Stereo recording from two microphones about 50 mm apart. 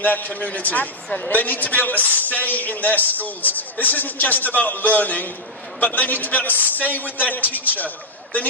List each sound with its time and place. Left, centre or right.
0.0 s a man's voice: left